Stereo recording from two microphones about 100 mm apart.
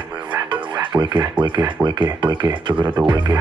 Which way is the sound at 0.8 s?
50° right (ahead or behind).